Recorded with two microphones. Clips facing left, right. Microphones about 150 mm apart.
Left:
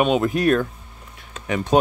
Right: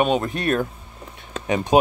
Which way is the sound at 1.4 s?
20° right (ahead or behind).